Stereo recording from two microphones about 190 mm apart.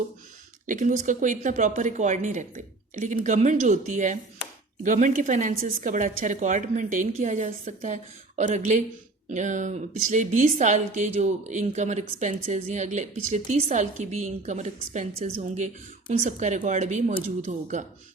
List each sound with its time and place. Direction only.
0.7 s a woman's voice: 40° right (ahead or behind)